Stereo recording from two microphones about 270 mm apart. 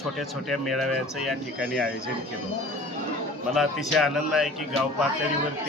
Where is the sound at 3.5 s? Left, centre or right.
Centre.